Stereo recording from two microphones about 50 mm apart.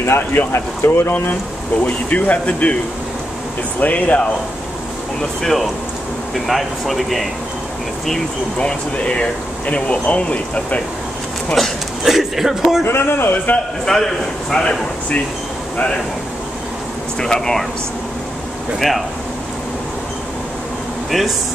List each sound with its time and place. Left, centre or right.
0.0 s speech: left
1.9 s speech: left
3.8 s speech: left
5.4 s speech: centre
8.5 s speech: left
11.6 s a man's voice: centre
12.8 s speech: left
13.8 s speech: centre
17.2 s speech: centre
18.8 s speech: centre